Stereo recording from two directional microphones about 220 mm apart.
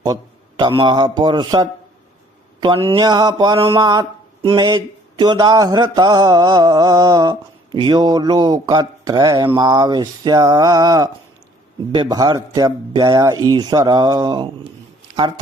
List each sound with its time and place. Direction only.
0.0 s a man's voice: 20° right (ahead or behind)